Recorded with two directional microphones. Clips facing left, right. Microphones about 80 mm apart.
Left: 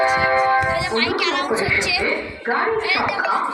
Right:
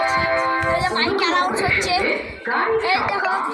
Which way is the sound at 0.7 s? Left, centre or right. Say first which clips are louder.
Right 1 dB; right.